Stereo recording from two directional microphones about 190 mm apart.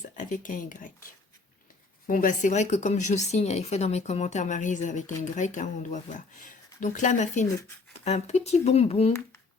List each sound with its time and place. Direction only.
0.2 s speech: 45° left (ahead or behind)
2.0 s speech: 45° left (ahead or behind)